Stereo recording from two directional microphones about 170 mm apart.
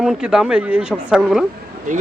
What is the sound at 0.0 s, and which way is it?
Speech, 5° right (ahead or behind).